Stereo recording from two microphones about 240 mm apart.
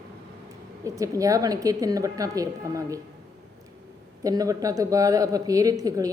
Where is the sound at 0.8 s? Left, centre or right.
Centre.